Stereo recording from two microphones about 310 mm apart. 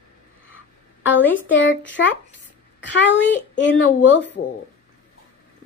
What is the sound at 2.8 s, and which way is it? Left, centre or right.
Speech, left.